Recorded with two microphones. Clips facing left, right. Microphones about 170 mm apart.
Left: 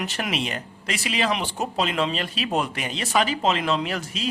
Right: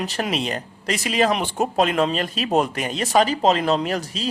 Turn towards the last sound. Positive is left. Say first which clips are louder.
# right 3 dB
turn(degrees=-35)  # may be behind; listen again after turning